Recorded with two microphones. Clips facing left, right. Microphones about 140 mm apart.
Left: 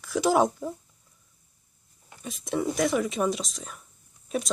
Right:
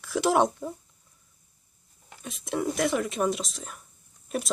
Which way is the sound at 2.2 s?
Centre (ahead or behind).